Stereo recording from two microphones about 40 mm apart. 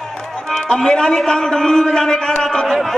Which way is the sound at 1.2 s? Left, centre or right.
Centre.